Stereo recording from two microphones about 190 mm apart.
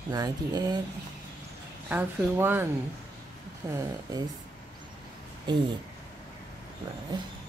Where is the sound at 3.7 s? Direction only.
20° right (ahead or behind).